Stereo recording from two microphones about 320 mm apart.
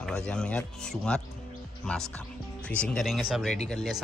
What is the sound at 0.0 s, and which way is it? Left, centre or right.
Speech, centre.